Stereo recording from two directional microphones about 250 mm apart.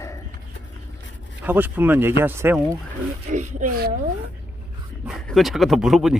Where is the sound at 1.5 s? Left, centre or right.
Centre.